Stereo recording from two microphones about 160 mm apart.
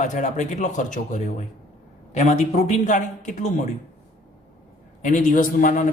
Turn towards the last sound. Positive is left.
turn(degrees=55)  # may be behind; listen again after turning